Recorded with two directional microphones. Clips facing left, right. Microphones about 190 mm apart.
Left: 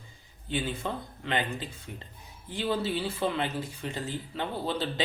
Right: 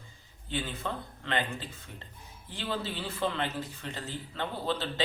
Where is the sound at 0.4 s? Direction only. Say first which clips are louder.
Left 3 dB; 15° left (ahead or behind).